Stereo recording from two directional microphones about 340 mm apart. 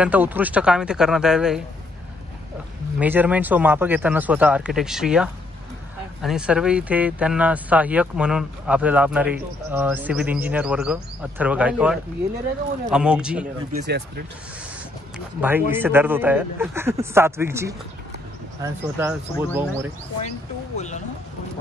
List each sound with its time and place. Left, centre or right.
0.0 s speech: centre
3.0 s speech: centre
13.8 s speech: right
15.1 s a man's voice: centre
20.2 s speech: centre